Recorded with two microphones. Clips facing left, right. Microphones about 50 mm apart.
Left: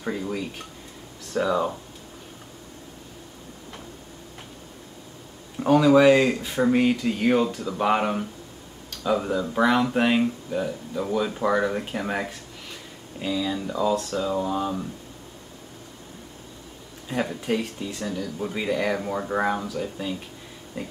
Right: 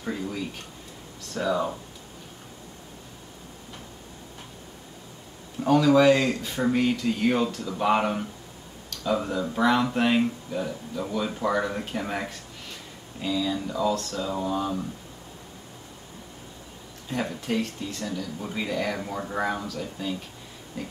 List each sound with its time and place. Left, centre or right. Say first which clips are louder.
1.3 s speech: left 3 dB; centre
5.6 s speech: left 2 dB; centre
17.1 s speech: left 2 dB; centre
20.7 s a sound: left 2 dB; left